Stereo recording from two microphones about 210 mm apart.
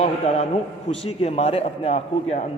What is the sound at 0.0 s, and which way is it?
A man's voice, 30° left (ahead or behind).